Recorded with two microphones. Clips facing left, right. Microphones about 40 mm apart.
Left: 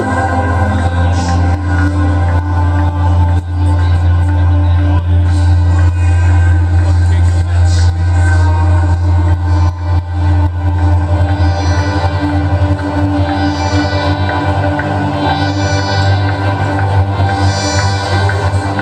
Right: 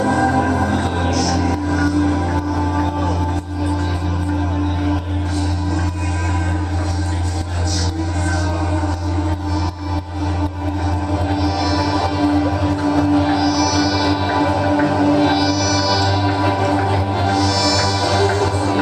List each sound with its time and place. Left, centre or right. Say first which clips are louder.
0.0 s music: left 2 dB; left
11.4 s music: left 1 dB; left; by 17.3 s centre
17.3 s music: even; left